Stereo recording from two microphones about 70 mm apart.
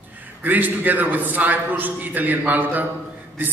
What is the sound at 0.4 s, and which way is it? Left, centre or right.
A man's voice, right.